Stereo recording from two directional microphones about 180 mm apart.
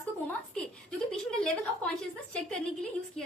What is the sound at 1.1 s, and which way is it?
A woman's voice, 5° left (ahead or behind).